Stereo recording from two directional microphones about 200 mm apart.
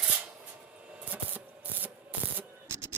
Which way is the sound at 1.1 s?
10° right (ahead or behind).